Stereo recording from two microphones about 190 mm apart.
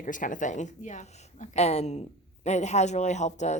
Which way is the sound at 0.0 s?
45° left (ahead or behind).